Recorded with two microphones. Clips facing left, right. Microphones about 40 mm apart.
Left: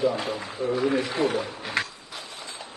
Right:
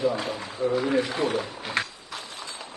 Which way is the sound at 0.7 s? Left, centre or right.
Right.